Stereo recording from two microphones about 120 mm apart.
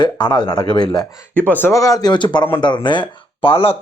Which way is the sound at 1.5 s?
15° left (ahead or behind).